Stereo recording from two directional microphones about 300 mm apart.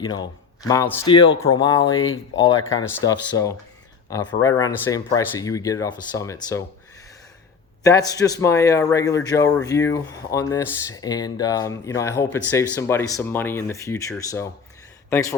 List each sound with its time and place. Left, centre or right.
0.0 s speech: centre
1.9 s speech: left
2.7 s speech: centre
7.9 s speech: centre